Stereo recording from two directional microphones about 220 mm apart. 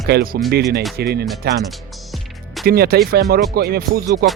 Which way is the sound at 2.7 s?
45° right (ahead or behind).